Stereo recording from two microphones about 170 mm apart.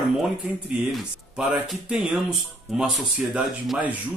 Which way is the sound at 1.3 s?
Centre (ahead or behind).